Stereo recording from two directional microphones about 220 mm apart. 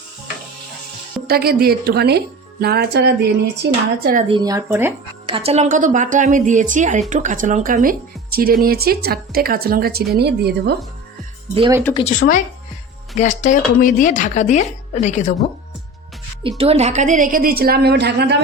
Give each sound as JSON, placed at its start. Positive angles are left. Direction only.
{"t": 1.3, "sound": "a woman's voice", "side_deg": -45}
{"t": 4.0, "sound": "a woman's voice", "side_deg": -40}
{"t": 4.3, "sound": "speech", "side_deg": -20}
{"t": 5.3, "sound": "a woman's voice", "side_deg": -25}
{"t": 11.5, "sound": "speech", "side_deg": -20}
{"t": 11.9, "sound": "speech", "side_deg": 30}
{"t": 16.6, "sound": "a woman's voice", "side_deg": -30}